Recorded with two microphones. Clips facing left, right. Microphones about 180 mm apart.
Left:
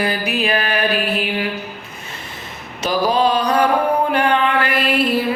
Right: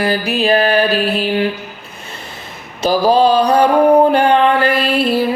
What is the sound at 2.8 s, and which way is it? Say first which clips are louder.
Mantra: right 5 dB; 30° right (ahead or behind).